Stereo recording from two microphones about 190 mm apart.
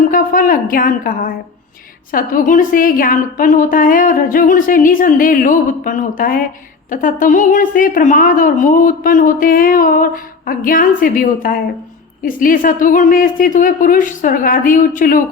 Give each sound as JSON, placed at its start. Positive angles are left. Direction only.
{"t": 0.1, "sound": "a woman's voice", "side_deg": 50}